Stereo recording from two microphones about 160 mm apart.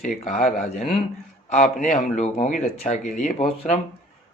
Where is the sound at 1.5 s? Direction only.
55° left (ahead or behind).